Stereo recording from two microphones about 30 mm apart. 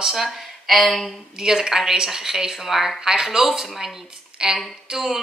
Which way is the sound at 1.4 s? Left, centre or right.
Centre.